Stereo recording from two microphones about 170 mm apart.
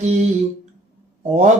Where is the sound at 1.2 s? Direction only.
40° right (ahead or behind).